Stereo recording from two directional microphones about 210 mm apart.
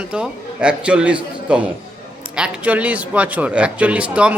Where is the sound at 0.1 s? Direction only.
5° right (ahead or behind).